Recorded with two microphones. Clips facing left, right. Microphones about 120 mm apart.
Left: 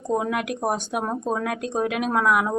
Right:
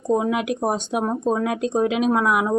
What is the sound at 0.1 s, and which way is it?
A woman's voice, 10° right (ahead or behind).